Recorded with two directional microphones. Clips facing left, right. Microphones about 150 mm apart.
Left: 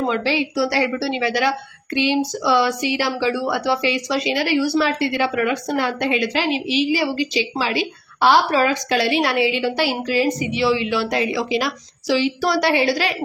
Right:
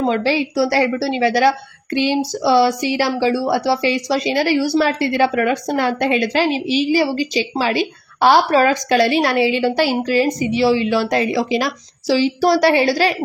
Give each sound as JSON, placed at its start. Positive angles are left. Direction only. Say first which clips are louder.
{"t": 0.1, "sound": "a woman's voice", "louder": "right 3 dB", "side_deg": -40}